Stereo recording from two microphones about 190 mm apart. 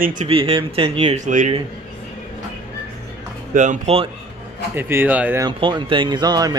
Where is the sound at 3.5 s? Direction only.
40° right (ahead or behind).